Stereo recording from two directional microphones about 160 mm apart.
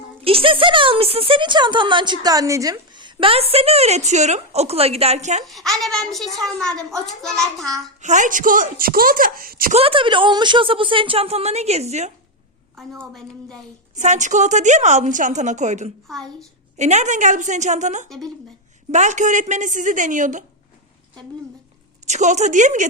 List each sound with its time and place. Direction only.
0.3 s speech: 35° right (ahead or behind)
5.5 s a child's voice: centre (ahead or behind)
8.0 s speech: 50° right (ahead or behind)
9.7 s speech: 35° right (ahead or behind)
13.9 s a woman's voice: 50° right (ahead or behind)
16.0 s a child's voice: centre (ahead or behind)
16.7 s a woman's voice: 45° right (ahead or behind)
22.0 s a woman's voice: 45° right (ahead or behind)